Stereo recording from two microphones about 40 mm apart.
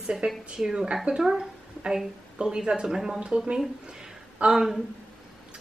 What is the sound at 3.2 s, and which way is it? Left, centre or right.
Speech, right.